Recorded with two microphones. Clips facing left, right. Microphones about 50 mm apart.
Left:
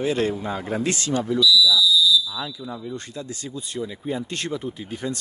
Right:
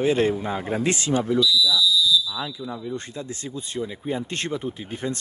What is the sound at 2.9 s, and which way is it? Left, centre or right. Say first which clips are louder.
Speech: right 1 dB; right.